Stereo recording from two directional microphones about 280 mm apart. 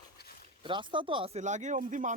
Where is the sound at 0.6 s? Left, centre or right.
Centre.